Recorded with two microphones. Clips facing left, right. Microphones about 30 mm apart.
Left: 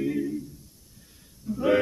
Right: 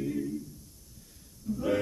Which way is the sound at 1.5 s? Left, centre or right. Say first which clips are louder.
Left 2 dB; left.